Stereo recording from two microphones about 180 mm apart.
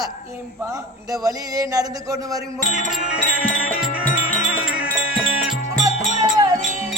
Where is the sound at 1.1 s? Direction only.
20° right (ahead or behind).